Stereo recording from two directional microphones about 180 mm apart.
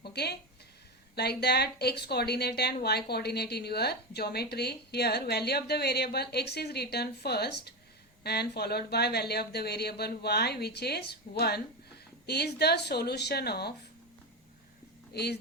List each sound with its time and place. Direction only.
0.0 s a sound: 65° left (ahead or behind)
1.1 s a woman's voice: 65° left (ahead or behind)
15.1 s speech: 65° left (ahead or behind)